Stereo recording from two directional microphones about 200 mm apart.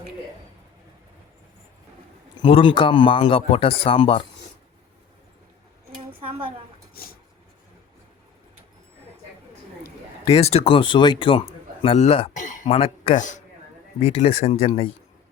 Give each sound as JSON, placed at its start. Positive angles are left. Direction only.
{"t": 2.4, "sound": "a man's voice", "side_deg": 25}
{"t": 10.2, "sound": "a man's voice", "side_deg": 30}